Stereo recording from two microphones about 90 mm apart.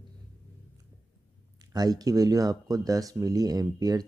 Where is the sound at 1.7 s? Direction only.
45° right (ahead or behind).